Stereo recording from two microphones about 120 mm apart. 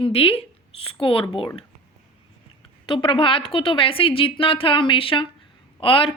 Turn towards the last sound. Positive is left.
turn(degrees=45)  # may be behind; listen again after turning